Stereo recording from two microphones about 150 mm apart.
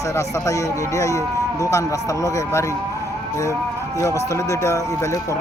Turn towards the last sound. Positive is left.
turn(degrees=20)  # may be behind; listen again after turning